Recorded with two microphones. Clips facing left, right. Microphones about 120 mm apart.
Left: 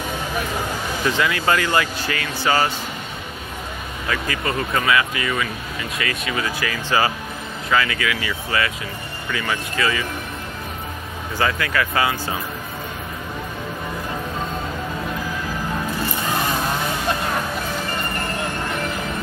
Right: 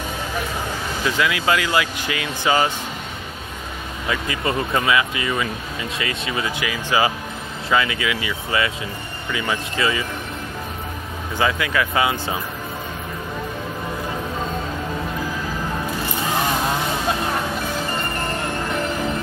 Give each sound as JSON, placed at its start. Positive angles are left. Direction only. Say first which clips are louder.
{"t": 1.0, "sound": "speech", "louder": "even", "side_deg": -5}
{"t": 4.1, "sound": "speech", "louder": "right 1 dB", "side_deg": -25}
{"t": 11.3, "sound": "speech", "louder": "right 1 dB", "side_deg": -15}